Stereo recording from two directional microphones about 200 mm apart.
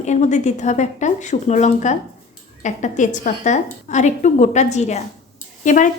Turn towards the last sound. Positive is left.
turn(degrees=40)  # may be behind; listen again after turning